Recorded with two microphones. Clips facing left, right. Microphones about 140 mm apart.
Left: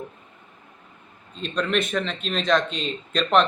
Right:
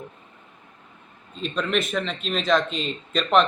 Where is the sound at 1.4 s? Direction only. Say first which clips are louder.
Left 1 dB; centre (ahead or behind).